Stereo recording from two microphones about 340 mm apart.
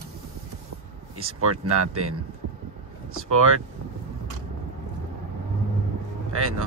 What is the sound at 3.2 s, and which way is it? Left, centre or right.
Speech, right.